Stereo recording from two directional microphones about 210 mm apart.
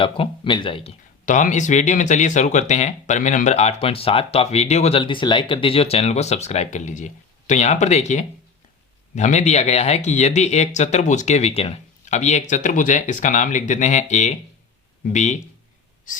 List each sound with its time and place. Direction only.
0.0 s speech: 25° left (ahead or behind)
1.2 s speech: 35° left (ahead or behind)